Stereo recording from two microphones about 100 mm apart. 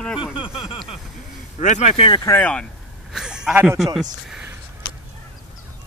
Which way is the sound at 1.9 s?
70° left (ahead or behind).